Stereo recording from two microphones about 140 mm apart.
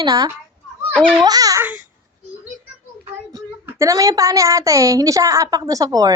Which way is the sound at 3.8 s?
25° right (ahead or behind).